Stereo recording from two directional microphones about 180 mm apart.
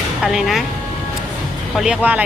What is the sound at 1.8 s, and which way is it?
Speech, 5° right (ahead or behind).